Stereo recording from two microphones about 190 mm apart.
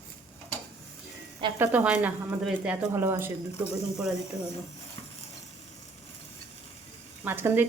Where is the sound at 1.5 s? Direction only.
10° right (ahead or behind).